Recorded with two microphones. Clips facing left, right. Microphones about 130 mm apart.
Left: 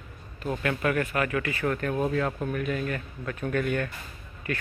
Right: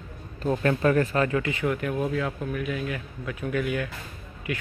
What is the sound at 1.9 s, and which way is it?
Speech, centre (ahead or behind).